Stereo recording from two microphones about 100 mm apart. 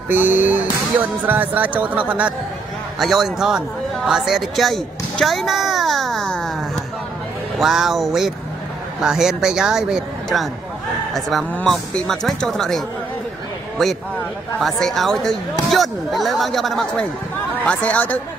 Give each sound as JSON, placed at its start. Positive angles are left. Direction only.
{"t": 0.1, "sound": "speech", "side_deg": -20}
{"t": 3.0, "sound": "speech", "side_deg": -5}
{"t": 17.6, "sound": "speech", "side_deg": 15}